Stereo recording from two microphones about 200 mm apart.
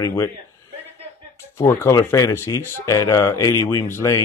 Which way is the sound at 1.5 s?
10° left (ahead or behind).